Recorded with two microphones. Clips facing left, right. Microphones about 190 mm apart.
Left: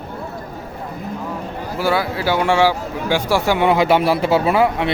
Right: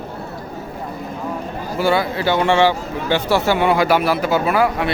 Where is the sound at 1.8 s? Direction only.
5° left (ahead or behind); by 4.9 s 25° left (ahead or behind).